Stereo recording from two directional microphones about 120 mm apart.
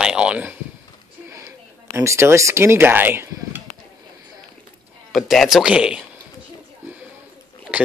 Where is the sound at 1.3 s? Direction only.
25° right (ahead or behind).